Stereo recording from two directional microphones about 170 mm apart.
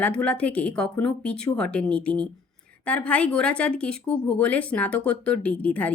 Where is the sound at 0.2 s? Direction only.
10° left (ahead or behind).